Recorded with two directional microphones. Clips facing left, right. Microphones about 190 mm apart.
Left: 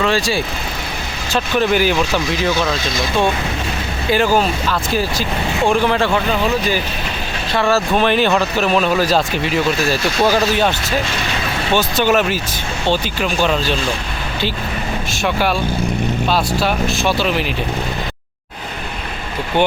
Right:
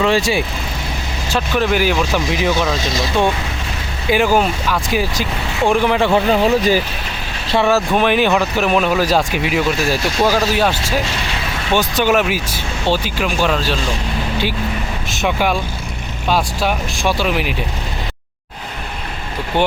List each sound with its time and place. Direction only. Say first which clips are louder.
0.0 s speech: right 2 dB; 20° right (ahead or behind)
1.3 s speech: left 1 dB; 5° right (ahead or behind)
2.1 s speech: right 1 dB; 15° right (ahead or behind)
2.7 s speech: right 1 dB; 40° right (ahead or behind)
4.1 s speech: right 1 dB; 15° right (ahead or behind)
6.1 s speech: right 4 dB; 35° right (ahead or behind)
7.5 s speech: right 1 dB; 20° right (ahead or behind)
15.1 s speech: right 1 dB; 15° right (ahead or behind)